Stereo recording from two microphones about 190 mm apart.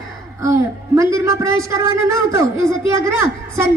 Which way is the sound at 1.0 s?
15° right (ahead or behind).